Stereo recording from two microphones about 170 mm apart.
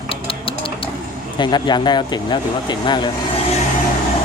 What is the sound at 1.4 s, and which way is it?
Speech, 25° left (ahead or behind).